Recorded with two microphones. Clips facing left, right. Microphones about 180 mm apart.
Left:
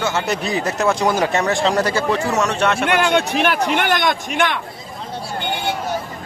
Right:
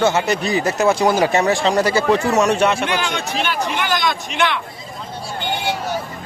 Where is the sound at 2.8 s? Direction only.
60° left (ahead or behind).